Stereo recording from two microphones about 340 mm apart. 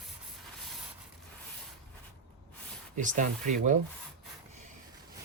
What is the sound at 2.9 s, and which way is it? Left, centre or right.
Speech, right.